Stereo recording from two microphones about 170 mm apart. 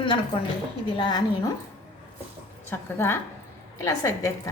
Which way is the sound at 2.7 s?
15° left (ahead or behind).